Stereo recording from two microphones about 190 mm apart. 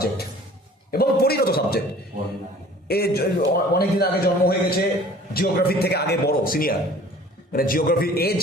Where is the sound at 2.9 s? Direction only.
55° left (ahead or behind).